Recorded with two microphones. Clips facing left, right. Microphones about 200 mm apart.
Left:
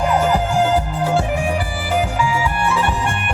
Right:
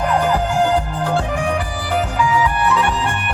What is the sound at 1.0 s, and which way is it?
Music, 10° left (ahead or behind).